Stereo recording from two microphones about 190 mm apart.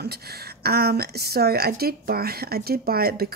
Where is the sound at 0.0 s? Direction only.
55° right (ahead or behind).